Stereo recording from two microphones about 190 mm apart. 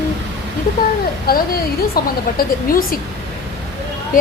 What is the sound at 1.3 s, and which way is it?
A woman's voice, 55° left (ahead or behind).